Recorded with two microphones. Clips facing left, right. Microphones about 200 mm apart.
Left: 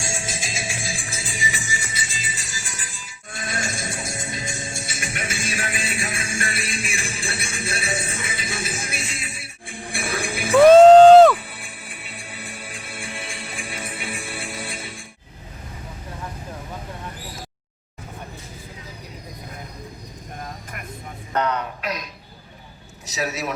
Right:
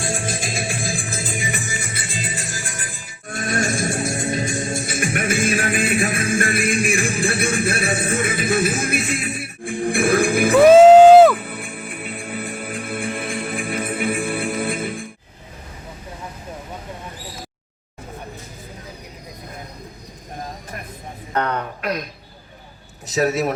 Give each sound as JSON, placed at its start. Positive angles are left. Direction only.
{"t": 0.0, "sound": "music", "side_deg": -55}
{"t": 10.7, "sound": "music", "side_deg": -5}
{"t": 11.3, "sound": "music", "side_deg": -55}
{"t": 21.3, "sound": "a sound", "side_deg": -55}
{"t": 23.0, "sound": "a man's voice", "side_deg": -55}